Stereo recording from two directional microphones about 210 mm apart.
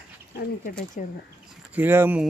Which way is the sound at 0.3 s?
40° left (ahead or behind).